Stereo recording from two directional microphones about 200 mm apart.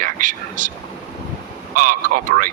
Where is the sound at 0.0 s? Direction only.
40° right (ahead or behind).